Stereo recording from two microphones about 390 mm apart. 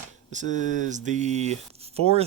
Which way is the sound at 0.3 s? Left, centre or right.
Centre.